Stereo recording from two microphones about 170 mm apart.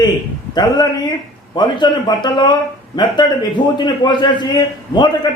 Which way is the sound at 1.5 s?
25° left (ahead or behind).